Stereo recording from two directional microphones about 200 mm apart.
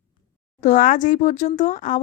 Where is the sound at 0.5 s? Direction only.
40° left (ahead or behind).